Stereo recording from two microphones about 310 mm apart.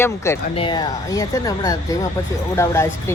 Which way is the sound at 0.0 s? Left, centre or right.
Centre.